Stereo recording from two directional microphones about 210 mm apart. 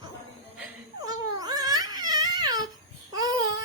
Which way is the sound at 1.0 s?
20° right (ahead or behind).